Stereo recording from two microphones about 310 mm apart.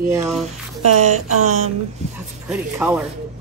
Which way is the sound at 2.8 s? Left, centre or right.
Centre.